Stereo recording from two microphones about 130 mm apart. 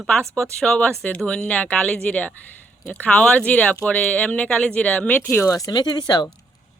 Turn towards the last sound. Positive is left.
turn(degrees=30)  # may be behind; listen again after turning